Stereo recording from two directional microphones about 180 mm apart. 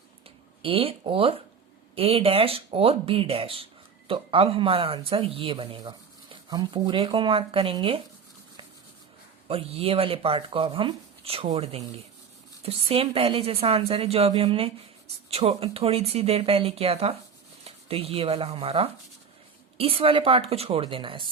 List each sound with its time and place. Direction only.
0.6 s speech: 30° right (ahead or behind)
9.5 s speech: 35° right (ahead or behind)